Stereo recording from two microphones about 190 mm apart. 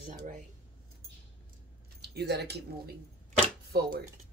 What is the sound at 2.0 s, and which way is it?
Speech, 60° right (ahead or behind).